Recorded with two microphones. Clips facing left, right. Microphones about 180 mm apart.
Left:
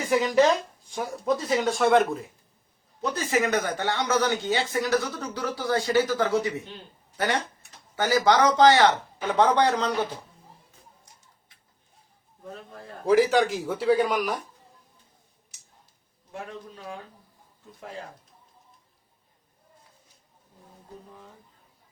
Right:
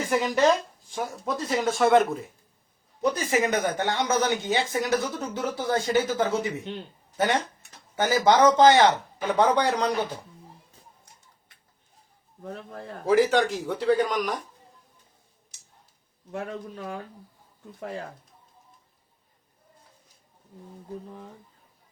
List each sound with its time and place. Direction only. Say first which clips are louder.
0.0 s speech: left 1 dB; centre (ahead or behind)
3.0 s speech: right 1 dB; 15° right (ahead or behind)
7.9 s a man's voice: right 1 dB; 20° right (ahead or behind)
12.5 s speech: right 4 dB; 55° right (ahead or behind)
13.1 s speech: left 1 dB; centre (ahead or behind)
16.3 s speech: right 5 dB; 55° right (ahead or behind)